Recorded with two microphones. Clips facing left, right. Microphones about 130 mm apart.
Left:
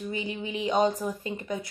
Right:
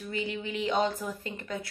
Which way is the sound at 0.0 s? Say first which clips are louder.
Left 1 dB; 20° left (ahead or behind).